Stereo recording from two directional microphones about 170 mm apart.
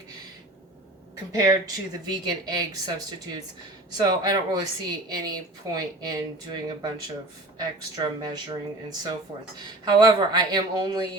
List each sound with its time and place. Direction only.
1.3 s speech: 20° right (ahead or behind)
3.9 s speech: 20° right (ahead or behind)
7.6 s speech: 20° right (ahead or behind)